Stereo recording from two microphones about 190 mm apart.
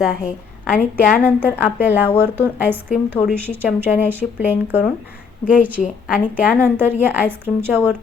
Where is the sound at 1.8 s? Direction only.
10° right (ahead or behind).